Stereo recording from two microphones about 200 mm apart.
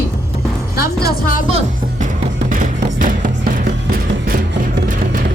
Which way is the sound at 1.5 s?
30° right (ahead or behind).